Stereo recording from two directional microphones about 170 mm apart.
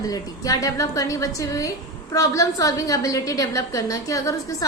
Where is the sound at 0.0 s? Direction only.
20° left (ahead or behind).